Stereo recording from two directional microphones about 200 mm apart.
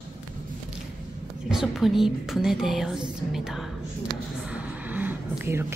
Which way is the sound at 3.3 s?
Centre (ahead or behind).